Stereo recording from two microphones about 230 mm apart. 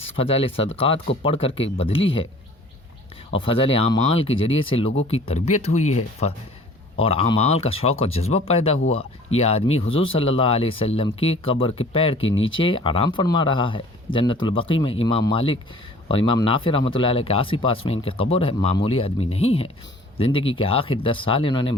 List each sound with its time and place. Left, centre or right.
0.2 s speech: left
3.3 s speech: left